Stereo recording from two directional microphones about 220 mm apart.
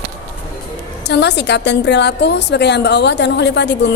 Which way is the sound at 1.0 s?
50° left (ahead or behind).